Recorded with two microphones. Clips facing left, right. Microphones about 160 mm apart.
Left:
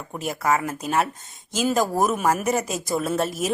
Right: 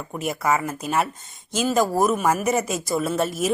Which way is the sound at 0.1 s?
Centre (ahead or behind).